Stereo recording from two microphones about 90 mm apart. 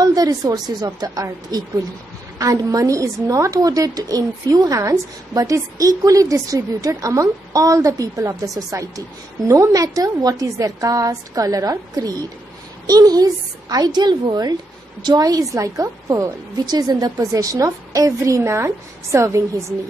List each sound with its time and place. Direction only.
0.0 s a woman's voice: 45° right (ahead or behind)